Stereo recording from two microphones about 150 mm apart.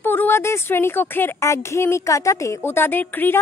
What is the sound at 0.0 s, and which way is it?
Speech, 15° left (ahead or behind).